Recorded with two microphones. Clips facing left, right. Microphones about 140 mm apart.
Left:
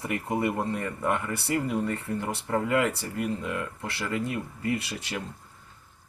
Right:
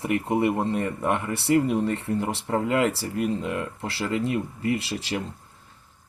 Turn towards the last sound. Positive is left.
turn(degrees=-30)  # may be behind; listen again after turning